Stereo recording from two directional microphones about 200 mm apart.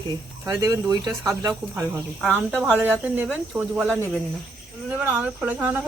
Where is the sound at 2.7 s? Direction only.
10° right (ahead or behind).